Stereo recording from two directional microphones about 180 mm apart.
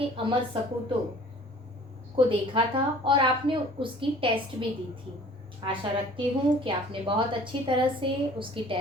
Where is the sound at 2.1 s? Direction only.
30° right (ahead or behind).